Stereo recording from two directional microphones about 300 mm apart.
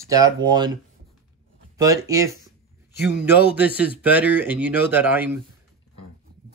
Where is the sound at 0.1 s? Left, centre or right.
Centre.